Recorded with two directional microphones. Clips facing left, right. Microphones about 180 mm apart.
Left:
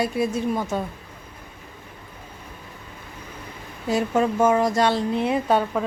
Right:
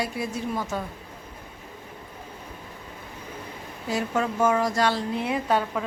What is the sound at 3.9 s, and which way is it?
Speech, 25° left (ahead or behind).